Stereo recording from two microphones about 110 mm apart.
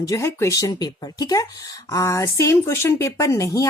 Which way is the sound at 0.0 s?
30° left (ahead or behind).